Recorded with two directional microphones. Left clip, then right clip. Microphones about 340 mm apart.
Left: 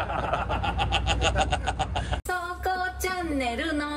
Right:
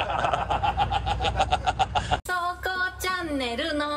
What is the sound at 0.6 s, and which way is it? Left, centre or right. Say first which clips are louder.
Speech: right 3 dB; centre.